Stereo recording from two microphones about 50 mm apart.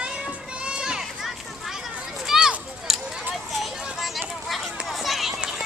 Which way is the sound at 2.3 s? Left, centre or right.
Centre.